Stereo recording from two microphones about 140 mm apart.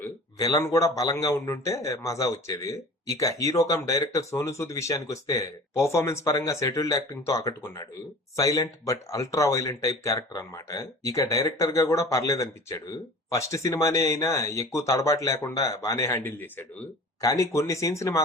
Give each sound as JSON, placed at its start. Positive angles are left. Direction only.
{"t": 0.3, "sound": "a man's voice", "side_deg": 25}
{"t": 17.2, "sound": "a man's voice", "side_deg": 25}